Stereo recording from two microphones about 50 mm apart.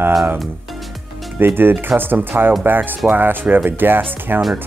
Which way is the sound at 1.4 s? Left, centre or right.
Right.